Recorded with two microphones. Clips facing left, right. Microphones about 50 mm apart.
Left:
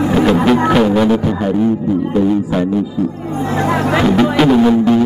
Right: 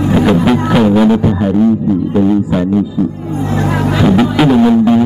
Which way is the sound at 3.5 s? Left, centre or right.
Left.